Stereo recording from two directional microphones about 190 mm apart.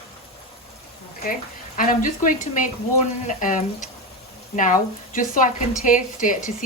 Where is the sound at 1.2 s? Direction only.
45° left (ahead or behind).